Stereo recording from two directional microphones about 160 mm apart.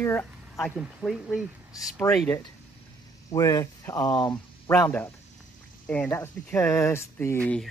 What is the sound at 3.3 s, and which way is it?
Speech, 20° left (ahead or behind).